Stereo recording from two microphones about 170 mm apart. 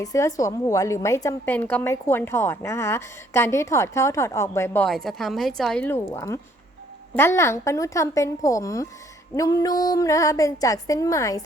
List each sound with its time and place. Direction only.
0.0 s a woman's voice: 20° left (ahead or behind)
4.9 s a woman's voice: centre (ahead or behind); by 11.3 s 20° left (ahead or behind)